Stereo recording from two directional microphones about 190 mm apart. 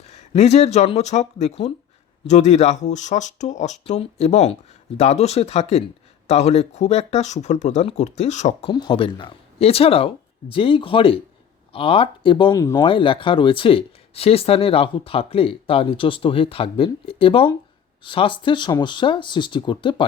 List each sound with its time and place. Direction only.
0.0 s speech: 35° left (ahead or behind)
8.7 s speech: 25° left (ahead or behind)